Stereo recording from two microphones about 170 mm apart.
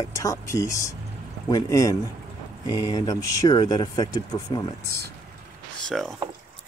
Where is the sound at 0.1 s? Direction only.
20° left (ahead or behind).